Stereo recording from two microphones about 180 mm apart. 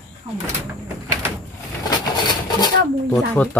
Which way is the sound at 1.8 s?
20° left (ahead or behind).